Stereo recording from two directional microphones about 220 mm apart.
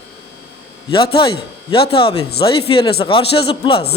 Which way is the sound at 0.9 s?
25° left (ahead or behind).